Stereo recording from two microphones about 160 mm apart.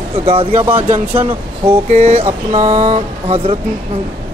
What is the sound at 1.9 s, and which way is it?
Speech, 40° right (ahead or behind).